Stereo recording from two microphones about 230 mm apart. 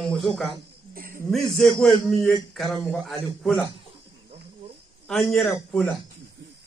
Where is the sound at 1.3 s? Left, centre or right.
Centre.